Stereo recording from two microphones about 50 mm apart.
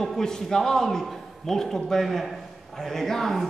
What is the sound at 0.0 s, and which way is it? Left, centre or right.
A man's voice, centre.